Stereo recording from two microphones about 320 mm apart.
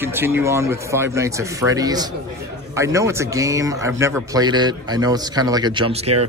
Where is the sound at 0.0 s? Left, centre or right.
Centre.